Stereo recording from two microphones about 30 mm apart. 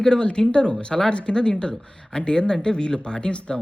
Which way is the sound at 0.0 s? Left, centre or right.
Left.